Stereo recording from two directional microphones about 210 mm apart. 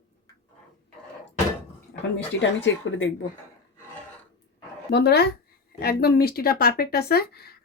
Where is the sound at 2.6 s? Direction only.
60° left (ahead or behind).